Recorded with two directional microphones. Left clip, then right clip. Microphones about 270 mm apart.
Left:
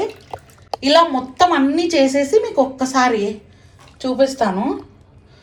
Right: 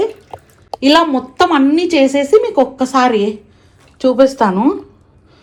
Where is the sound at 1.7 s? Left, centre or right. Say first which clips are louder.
Right 3 dB; right.